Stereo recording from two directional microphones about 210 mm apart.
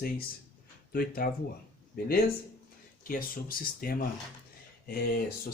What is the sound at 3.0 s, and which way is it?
Speech, 40° left (ahead or behind).